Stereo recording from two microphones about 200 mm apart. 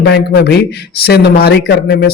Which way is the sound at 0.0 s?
55° left (ahead or behind).